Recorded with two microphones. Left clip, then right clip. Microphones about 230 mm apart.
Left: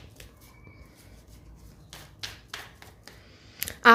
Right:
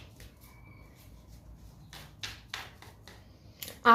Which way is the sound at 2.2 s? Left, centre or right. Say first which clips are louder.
Left 2 dB; centre.